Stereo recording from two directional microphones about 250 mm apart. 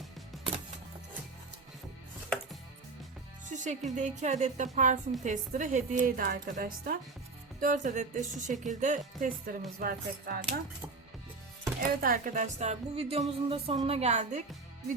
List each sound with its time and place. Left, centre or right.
3.5 s speech: right
5.2 s music: right
11.8 s speech: right